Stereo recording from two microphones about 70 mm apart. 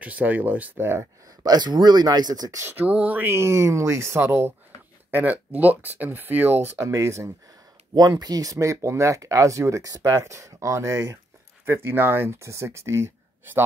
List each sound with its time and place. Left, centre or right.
0.0 s speech: right
1.4 s speech: right
2.7 s speech: centre
3.3 s speech: right
5.1 s speech: right
6.8 s speech: right
7.9 s speech: right